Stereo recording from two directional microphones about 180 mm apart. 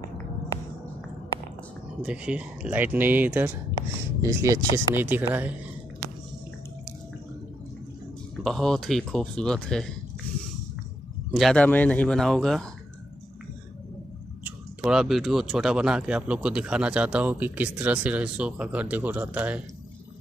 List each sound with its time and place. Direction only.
2.0 s speech: 5° right (ahead or behind)
8.5 s speech: centre (ahead or behind)
11.3 s speech: 5° left (ahead or behind)
14.8 s speech: 5° right (ahead or behind)